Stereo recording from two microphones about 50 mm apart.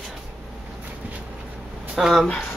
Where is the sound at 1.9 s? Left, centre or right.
Centre.